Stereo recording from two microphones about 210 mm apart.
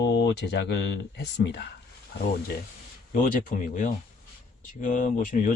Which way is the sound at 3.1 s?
40° left (ahead or behind).